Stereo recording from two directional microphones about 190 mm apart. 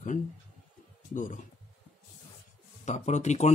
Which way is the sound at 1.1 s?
40° left (ahead or behind).